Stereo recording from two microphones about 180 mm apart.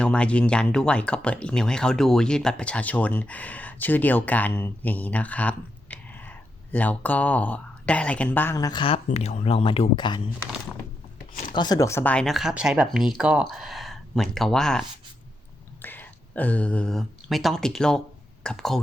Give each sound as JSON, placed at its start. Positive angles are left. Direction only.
{"t": 0.0, "sound": "speech", "side_deg": 5}
{"t": 9.0, "sound": "speech", "side_deg": 35}
{"t": 11.5, "sound": "speech", "side_deg": 20}